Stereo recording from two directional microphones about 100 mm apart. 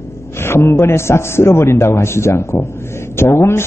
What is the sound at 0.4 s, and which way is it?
A man's voice, 25° left (ahead or behind).